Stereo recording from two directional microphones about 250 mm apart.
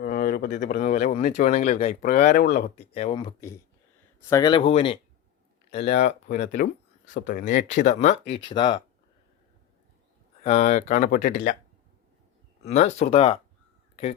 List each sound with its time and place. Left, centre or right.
0.0 s speech: left
2.7 s speech: left
10.4 s speech: left
12.6 s speech: left